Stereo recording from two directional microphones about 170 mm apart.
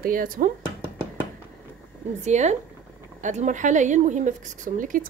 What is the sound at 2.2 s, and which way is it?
Speech, 40° right (ahead or behind).